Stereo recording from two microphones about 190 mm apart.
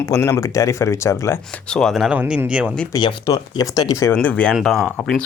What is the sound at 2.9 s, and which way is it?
Speech, 25° left (ahead or behind).